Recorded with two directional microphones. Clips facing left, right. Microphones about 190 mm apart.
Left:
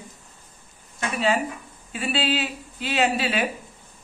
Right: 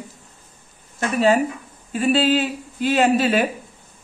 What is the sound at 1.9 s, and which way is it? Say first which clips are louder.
Speech: right 8 dB; 45° right (ahead or behind).